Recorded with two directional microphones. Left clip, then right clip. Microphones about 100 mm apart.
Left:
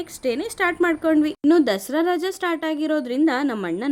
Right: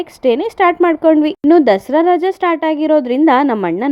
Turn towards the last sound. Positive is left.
turn(degrees=-55)  # may be behind; listen again after turning